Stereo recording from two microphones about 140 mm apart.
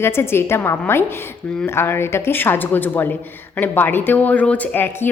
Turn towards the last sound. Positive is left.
turn(degrees=15)  # may be behind; listen again after turning